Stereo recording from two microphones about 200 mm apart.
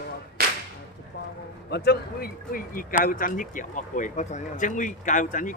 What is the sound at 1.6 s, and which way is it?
Speech, 55° left (ahead or behind).